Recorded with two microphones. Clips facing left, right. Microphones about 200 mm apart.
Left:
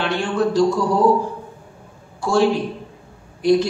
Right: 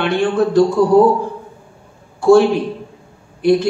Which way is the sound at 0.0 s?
55° right (ahead or behind).